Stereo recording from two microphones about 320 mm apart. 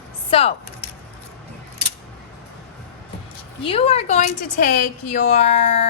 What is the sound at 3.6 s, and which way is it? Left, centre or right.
Speech, centre.